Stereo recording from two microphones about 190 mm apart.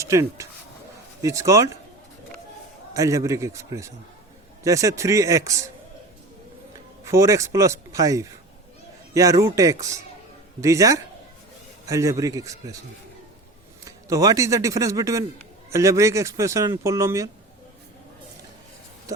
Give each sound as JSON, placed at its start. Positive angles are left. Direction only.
{"t": 0.0, "sound": "speech", "side_deg": -15}
{"t": 2.9, "sound": "speech", "side_deg": -15}
{"t": 7.0, "sound": "speech", "side_deg": -15}
{"t": 10.6, "sound": "speech", "side_deg": -15}
{"t": 13.8, "sound": "speech", "side_deg": -20}